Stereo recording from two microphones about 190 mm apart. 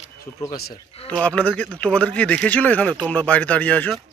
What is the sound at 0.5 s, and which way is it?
Speech, 55° left (ahead or behind).